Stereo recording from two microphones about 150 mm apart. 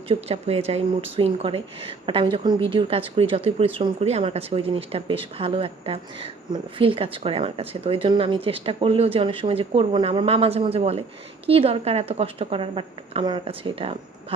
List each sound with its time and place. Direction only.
0.1 s speech: 45° right (ahead or behind)